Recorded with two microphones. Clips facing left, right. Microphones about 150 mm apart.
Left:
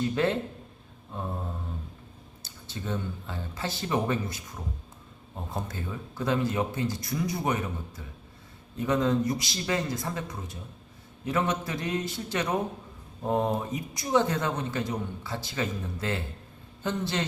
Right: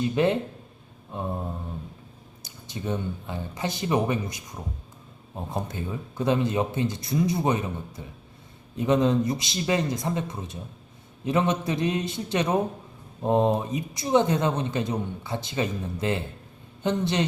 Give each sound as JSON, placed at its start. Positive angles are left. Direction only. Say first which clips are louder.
{"t": 0.0, "sound": "speech", "louder": "right 3 dB", "side_deg": -20}